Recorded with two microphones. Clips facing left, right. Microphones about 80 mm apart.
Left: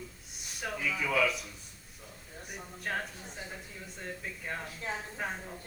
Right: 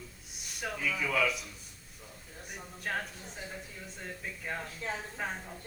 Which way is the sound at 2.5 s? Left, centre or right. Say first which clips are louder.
Even; centre.